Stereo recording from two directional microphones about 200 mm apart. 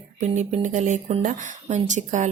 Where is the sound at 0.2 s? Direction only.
35° right (ahead or behind).